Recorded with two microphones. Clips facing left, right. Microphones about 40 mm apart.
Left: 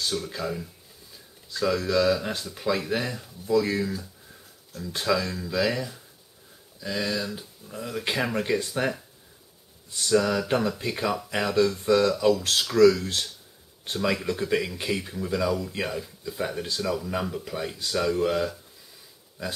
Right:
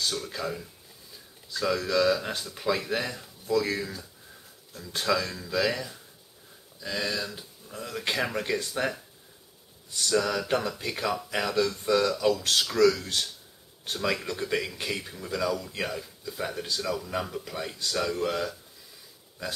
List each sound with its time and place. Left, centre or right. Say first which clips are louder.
0.0 s speech: left 2 dB; centre